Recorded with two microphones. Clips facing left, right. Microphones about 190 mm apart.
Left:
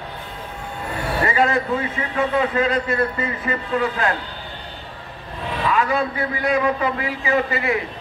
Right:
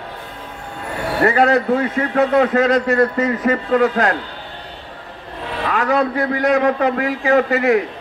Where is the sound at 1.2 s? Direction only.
65° right (ahead or behind).